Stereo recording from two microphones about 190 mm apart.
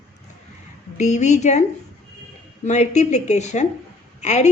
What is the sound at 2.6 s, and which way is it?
A woman's voice, 35° left (ahead or behind).